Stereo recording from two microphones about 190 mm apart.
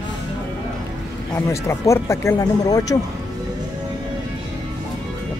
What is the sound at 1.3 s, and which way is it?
Speech, 15° left (ahead or behind).